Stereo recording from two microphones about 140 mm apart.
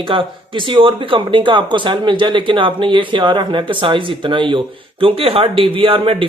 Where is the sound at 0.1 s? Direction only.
40° right (ahead or behind).